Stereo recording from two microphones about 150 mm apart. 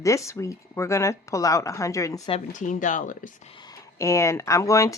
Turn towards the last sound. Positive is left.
turn(degrees=20)  # may be behind; listen again after turning